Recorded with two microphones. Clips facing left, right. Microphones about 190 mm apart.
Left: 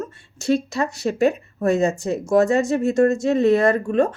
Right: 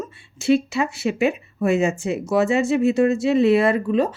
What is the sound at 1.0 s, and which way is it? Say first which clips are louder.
A woman's voice: left 4 dB; 40° left (ahead or behind).